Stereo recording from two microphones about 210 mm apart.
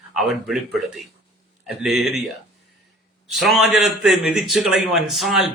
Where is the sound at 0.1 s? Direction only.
Centre (ahead or behind).